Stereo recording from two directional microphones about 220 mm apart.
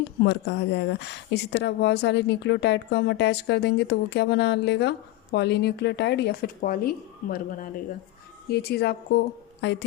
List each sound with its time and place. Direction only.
0.3 s speech: 50° left (ahead or behind)